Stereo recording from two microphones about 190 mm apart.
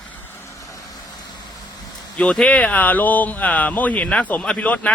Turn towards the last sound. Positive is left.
turn(degrees=5)  # may be behind; listen again after turning